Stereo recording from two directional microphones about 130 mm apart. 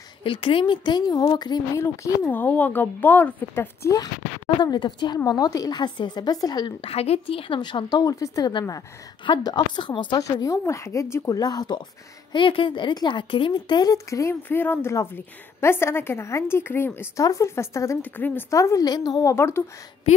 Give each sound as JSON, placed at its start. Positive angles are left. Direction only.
{"t": 0.2, "sound": "a woman's voice", "side_deg": 40}
{"t": 1.8, "sound": "a woman's voice", "side_deg": 20}
{"t": 4.6, "sound": "a woman's voice", "side_deg": 35}
{"t": 6.8, "sound": "a woman's voice", "side_deg": 50}
{"t": 10.2, "sound": "speech", "side_deg": 25}
{"t": 19.3, "sound": "speech", "side_deg": 20}